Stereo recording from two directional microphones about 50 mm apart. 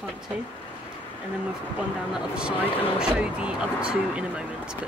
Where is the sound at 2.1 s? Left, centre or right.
Centre.